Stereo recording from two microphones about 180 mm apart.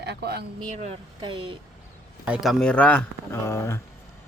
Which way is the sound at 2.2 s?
5° right (ahead or behind).